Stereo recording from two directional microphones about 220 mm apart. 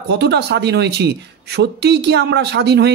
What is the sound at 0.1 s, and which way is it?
Speech, 50° right (ahead or behind).